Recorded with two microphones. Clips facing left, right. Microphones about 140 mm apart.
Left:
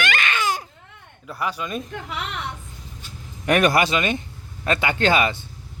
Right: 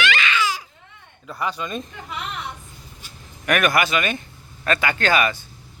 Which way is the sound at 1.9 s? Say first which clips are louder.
Left 2 dB; 65° left (ahead or behind).